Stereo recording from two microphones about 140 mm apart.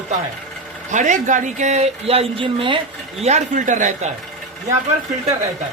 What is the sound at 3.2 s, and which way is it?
Speech, 55° right (ahead or behind).